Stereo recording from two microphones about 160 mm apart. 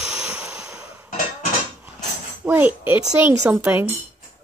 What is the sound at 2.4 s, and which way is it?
Speech, 10° right (ahead or behind).